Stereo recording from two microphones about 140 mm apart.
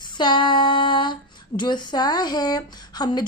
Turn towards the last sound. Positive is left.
turn(degrees=30)  # may be behind; listen again after turning